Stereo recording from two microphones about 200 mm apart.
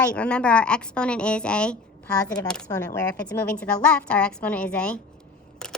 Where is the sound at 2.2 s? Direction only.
20° left (ahead or behind).